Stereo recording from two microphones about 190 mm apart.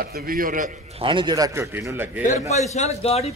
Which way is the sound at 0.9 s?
25° right (ahead or behind).